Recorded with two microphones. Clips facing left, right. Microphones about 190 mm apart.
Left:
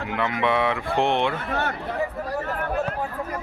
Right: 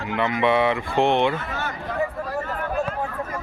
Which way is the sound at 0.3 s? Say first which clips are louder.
Right 3 dB; centre (ahead or behind).